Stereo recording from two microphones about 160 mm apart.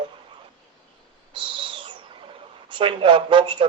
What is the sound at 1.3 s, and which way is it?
Owl, 30° right (ahead or behind).